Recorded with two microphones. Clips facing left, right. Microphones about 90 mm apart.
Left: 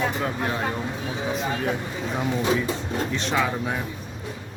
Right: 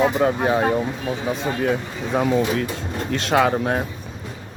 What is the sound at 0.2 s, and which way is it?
Speech, 80° right.